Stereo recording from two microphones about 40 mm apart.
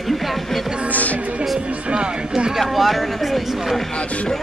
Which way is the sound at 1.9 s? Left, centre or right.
Right.